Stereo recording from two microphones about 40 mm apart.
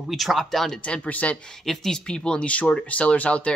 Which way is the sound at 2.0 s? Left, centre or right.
Left.